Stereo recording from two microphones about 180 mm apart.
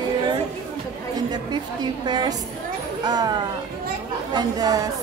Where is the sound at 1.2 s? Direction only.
25° right (ahead or behind).